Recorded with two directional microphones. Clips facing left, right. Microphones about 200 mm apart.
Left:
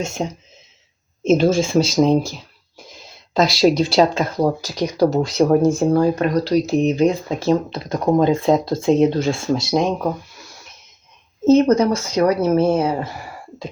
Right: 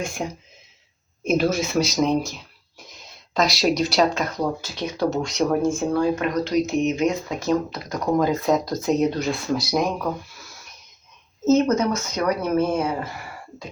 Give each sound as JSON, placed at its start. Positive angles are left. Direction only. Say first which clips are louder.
{"t": 0.0, "sound": "speech", "louder": "left 4 dB", "side_deg": 25}
{"t": 11.4, "sound": "speech", "louder": "left 5 dB", "side_deg": 30}